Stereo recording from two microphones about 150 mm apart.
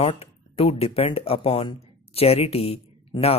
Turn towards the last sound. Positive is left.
turn(degrees=40)  # may be behind; listen again after turning